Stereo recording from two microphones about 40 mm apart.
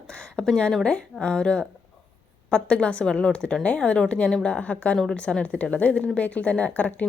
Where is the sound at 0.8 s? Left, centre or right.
Left.